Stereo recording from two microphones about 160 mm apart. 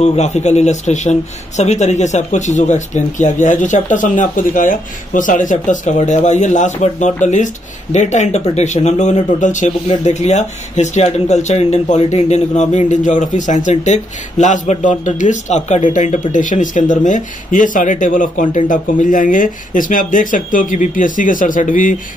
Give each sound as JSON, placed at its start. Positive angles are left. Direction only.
{"t": 0.0, "sound": "speech", "side_deg": 45}